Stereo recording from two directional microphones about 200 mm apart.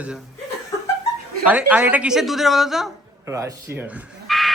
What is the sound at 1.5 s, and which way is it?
A woman's voice, 10° right (ahead or behind).